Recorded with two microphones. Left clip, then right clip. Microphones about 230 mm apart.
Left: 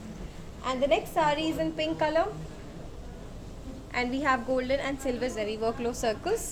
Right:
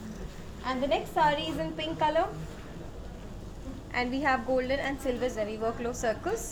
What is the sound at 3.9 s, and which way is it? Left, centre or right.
A woman's voice, centre.